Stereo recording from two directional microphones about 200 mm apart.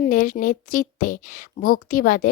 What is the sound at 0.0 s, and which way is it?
Speech, 40° left (ahead or behind).